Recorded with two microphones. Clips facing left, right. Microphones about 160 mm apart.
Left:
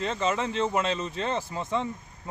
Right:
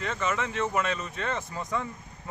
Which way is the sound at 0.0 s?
30° left (ahead or behind).